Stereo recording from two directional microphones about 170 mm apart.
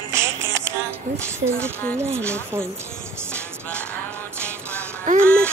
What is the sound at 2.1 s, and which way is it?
Music, 15° right (ahead or behind).